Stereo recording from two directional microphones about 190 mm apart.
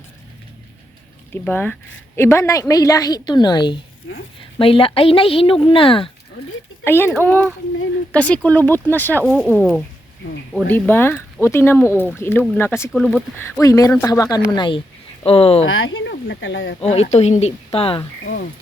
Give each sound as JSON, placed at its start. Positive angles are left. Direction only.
{"t": 1.3, "sound": "speech", "side_deg": 10}
{"t": 6.8, "sound": "speech", "side_deg": 10}
{"t": 15.6, "sound": "speech", "side_deg": 90}
{"t": 16.8, "sound": "speech", "side_deg": 35}